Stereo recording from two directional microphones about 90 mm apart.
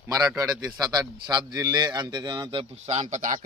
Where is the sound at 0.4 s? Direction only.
45° right (ahead or behind).